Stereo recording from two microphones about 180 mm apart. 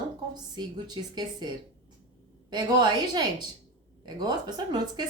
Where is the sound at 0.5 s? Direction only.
25° right (ahead or behind).